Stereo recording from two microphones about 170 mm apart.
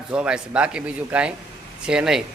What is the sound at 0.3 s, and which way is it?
A man's voice, 5° right (ahead or behind).